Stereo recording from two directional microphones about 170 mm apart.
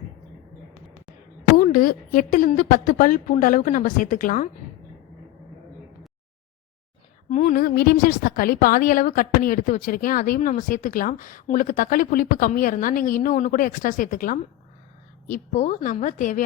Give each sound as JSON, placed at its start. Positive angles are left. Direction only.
{"t": 1.5, "sound": "a woman's voice", "side_deg": 55}
{"t": 7.3, "sound": "a woman's voice", "side_deg": 50}